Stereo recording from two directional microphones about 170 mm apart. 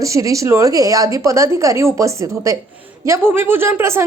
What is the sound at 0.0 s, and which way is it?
A woman's voice, 20° right (ahead or behind).